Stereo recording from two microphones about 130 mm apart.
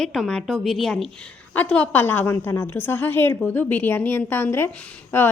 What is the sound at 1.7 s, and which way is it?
A woman's voice, 10° left (ahead or behind).